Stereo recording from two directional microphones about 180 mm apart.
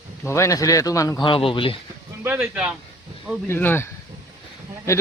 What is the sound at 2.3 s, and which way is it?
Speech, 5° right (ahead or behind).